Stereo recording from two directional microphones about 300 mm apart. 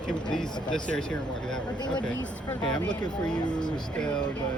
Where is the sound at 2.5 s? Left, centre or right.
Centre.